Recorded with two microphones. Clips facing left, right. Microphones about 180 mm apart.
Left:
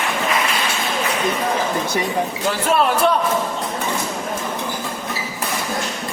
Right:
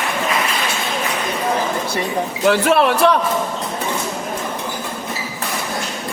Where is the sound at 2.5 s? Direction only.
70° right (ahead or behind).